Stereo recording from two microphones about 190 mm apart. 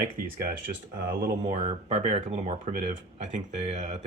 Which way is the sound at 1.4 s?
35° right (ahead or behind).